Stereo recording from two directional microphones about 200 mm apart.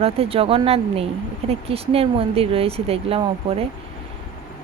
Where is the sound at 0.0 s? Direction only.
30° right (ahead or behind).